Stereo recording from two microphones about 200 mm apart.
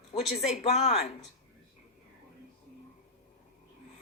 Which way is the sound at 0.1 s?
30° left (ahead or behind).